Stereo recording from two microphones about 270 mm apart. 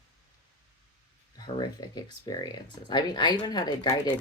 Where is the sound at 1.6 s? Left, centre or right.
Centre.